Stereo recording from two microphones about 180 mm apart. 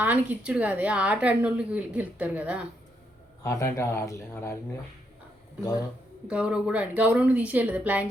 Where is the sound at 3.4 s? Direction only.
15° left (ahead or behind).